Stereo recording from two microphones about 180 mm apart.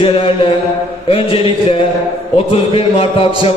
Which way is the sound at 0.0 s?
30° left (ahead or behind).